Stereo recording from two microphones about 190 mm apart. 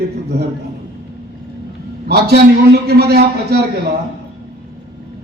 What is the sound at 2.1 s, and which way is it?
A man's voice, 60° right (ahead or behind).